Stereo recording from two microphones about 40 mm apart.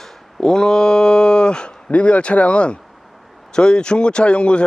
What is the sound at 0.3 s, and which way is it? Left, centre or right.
Speech, centre.